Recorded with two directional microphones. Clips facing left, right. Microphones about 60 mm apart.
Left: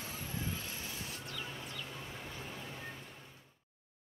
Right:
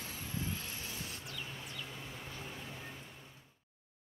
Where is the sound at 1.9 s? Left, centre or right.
Centre.